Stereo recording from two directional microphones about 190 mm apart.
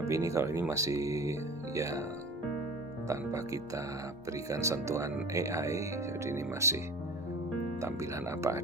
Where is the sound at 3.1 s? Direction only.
15° right (ahead or behind).